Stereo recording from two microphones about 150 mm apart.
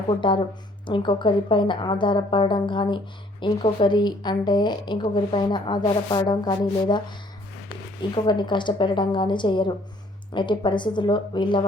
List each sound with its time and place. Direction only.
0.1 s a woman's voice: 35° left (ahead or behind)
8.1 s a woman's voice: 30° left (ahead or behind)